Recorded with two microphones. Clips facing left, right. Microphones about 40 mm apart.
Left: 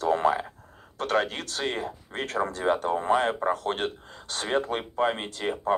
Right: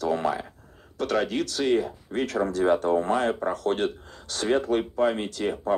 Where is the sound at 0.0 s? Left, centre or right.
Left.